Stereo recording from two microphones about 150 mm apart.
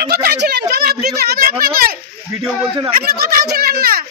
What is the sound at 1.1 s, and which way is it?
A child's voice, 90° right.